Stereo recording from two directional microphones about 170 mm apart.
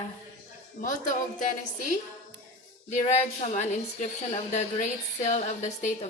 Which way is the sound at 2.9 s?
45° left (ahead or behind).